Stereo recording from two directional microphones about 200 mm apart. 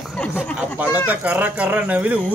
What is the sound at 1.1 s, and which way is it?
A man's voice, 10° right (ahead or behind).